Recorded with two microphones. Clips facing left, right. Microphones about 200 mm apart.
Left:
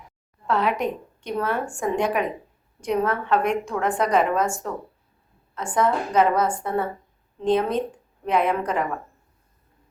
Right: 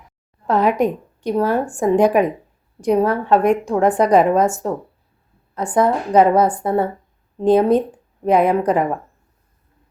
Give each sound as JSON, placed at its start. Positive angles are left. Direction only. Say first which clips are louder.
{"t": 0.4, "sound": "a woman's voice", "louder": "right 7 dB", "side_deg": -40}